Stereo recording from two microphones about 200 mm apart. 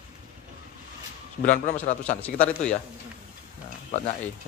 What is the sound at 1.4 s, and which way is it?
Speech, 40° left (ahead or behind).